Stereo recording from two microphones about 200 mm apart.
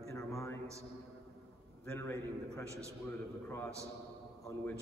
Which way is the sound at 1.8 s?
10° left (ahead or behind).